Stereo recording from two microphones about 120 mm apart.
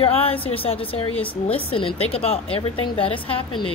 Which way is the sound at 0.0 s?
50° left (ahead or behind).